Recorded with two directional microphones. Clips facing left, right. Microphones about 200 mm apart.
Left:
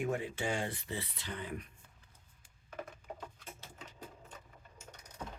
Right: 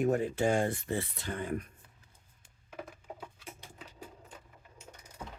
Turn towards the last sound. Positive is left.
turn(degrees=-10)  # may be behind; listen again after turning